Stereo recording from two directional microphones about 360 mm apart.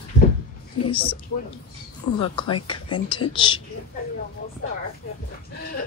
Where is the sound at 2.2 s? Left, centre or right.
Centre.